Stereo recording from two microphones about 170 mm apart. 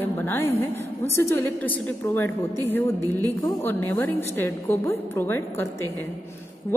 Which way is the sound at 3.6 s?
10° left (ahead or behind).